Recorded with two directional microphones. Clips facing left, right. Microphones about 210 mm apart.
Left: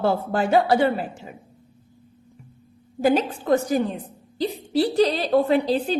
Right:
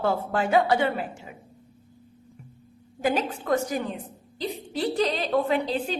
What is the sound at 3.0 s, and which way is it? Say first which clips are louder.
A woman's voice: left 5 dB; 30° left (ahead or behind).